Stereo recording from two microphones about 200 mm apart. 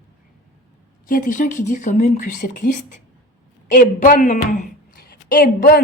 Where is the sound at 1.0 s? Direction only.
40° left (ahead or behind).